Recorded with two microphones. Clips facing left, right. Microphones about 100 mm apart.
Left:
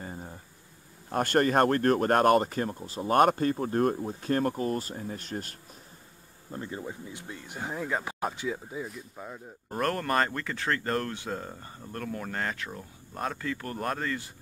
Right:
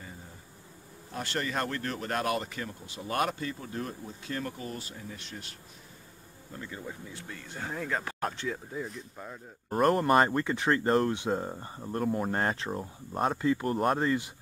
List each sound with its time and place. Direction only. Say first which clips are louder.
0.0 s insect: left 7 dB; 45° left (ahead or behind)
1.1 s speech: left 9 dB; 50° left (ahead or behind)
6.5 s speech: left 5 dB; 30° left (ahead or behind)
6.9 s speech: left 2 dB; 20° left (ahead or behind)
9.7 s speech: right 5 dB; 15° right (ahead or behind)